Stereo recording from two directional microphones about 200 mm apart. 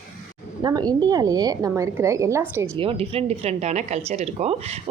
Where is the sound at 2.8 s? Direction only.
30° right (ahead or behind).